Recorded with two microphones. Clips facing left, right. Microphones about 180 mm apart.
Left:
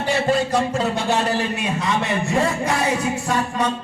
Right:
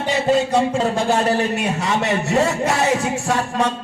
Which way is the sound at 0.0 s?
20° right (ahead or behind).